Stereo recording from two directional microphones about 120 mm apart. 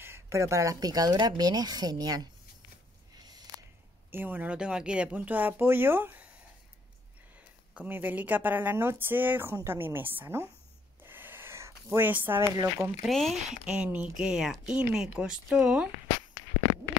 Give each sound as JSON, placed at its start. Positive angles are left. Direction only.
{"t": 0.0, "sound": "speech", "side_deg": -20}
{"t": 4.1, "sound": "a woman's voice", "side_deg": -15}
{"t": 7.3, "sound": "a woman's voice", "side_deg": -10}
{"t": 11.0, "sound": "a sound", "side_deg": -15}
{"t": 12.6, "sound": "a woman's voice", "side_deg": -20}
{"t": 13.0, "sound": "a woman's voice", "side_deg": 0}